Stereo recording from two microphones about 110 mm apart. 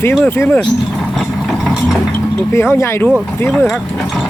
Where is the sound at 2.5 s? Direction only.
25° left (ahead or behind).